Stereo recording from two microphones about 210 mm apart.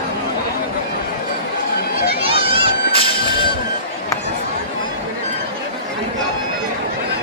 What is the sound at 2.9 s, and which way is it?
Music, 25° left (ahead or behind).